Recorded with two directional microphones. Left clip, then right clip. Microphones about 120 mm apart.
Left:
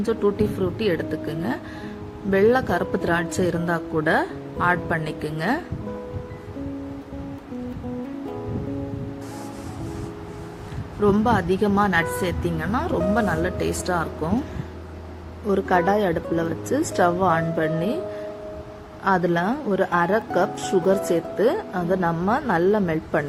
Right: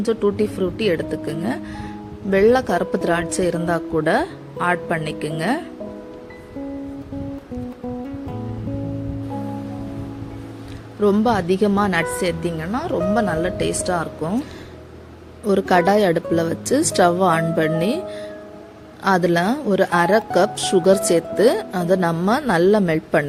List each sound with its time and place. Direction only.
0.0 s speech: 60° right (ahead or behind)
11.0 s speech: 65° right (ahead or behind); by 13.0 s 45° right (ahead or behind)
13.1 s speech: 55° right (ahead or behind)
15.4 s speech: 90° right
19.0 s speech: 80° right